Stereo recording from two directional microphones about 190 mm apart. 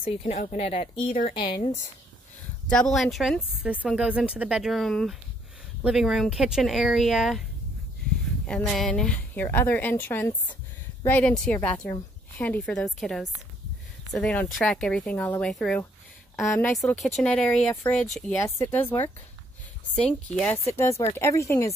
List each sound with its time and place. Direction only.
0.0 s speech: 35° left (ahead or behind)
2.7 s speech: centre (ahead or behind)
8.5 s a woman's voice: 5° left (ahead or behind)
20.9 s speech: 35° left (ahead or behind)
21.2 s a woman's voice: 15° left (ahead or behind)